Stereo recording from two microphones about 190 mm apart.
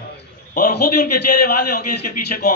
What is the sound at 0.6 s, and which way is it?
A man's voice, 55° left (ahead or behind).